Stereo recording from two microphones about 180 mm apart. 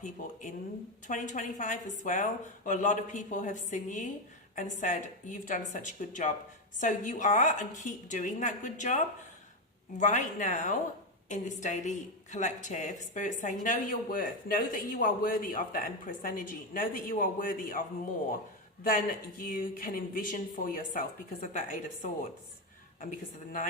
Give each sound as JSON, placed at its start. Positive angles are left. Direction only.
{"t": 1.0, "sound": "a woman's voice", "side_deg": 45}
{"t": 10.0, "sound": "a woman's voice", "side_deg": 45}